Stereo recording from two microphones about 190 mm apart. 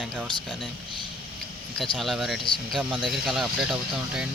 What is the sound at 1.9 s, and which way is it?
Speech, centre (ahead or behind).